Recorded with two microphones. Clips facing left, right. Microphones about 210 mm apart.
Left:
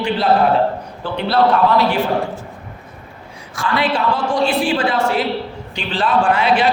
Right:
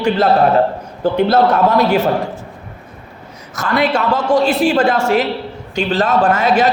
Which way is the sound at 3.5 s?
45° right (ahead or behind).